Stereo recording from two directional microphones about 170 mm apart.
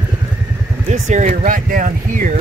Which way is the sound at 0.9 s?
45° right (ahead or behind).